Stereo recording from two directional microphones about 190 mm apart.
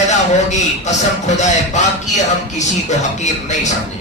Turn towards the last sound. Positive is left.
turn(degrees=40)  # may be behind; listen again after turning